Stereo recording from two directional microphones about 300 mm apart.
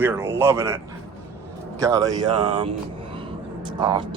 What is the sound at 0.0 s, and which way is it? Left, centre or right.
Speech, centre.